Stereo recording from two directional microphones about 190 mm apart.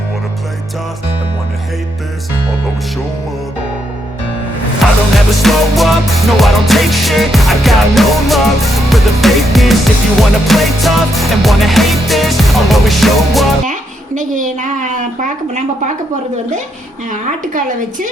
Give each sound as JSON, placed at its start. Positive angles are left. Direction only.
{"t": 4.8, "sound": "music", "side_deg": 0}
{"t": 14.2, "sound": "a woman's voice", "side_deg": -40}
{"t": 17.1, "sound": "a woman's voice", "side_deg": -40}